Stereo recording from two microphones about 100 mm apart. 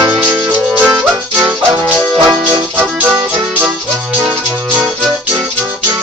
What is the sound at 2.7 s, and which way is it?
Music, 15° right (ahead or behind).